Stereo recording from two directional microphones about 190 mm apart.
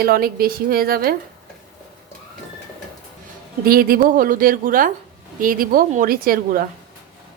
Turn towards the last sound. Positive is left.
turn(degrees=-50)  # may be behind; listen again after turning